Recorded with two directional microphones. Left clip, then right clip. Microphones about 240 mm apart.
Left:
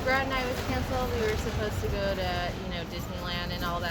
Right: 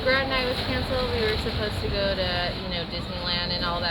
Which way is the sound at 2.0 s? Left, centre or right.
Centre.